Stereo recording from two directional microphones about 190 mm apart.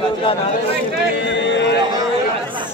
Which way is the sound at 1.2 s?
70° left (ahead or behind).